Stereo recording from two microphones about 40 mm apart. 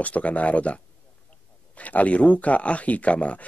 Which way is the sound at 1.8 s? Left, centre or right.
Left.